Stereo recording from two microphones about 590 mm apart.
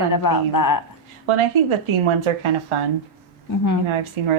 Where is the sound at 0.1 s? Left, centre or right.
Left.